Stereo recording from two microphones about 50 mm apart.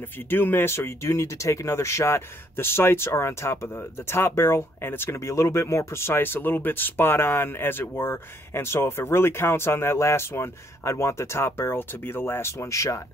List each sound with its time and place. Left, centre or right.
0.3 s speech: left
5.2 s speech: left
10.8 s speech: left